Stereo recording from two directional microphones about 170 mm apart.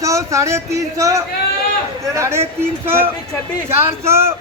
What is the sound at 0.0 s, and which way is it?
Speech, 20° right (ahead or behind).